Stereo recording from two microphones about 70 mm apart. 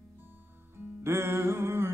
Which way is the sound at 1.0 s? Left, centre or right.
Right.